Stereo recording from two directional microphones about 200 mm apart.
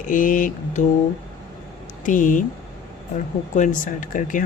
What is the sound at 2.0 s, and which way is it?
Speech, 40° left (ahead or behind).